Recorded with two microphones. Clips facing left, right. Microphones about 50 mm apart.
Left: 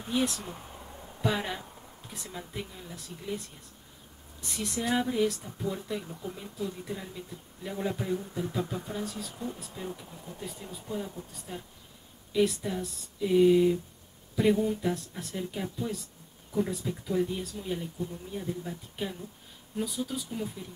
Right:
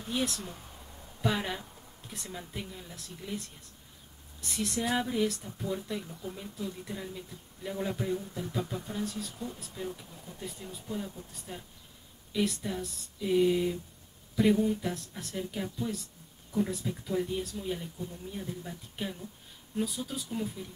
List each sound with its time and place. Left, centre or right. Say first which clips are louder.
0.1 s speech: left 3 dB; centre
0.5 s a sound: left 4 dB; centre
1.2 s speech: left 1 dB; centre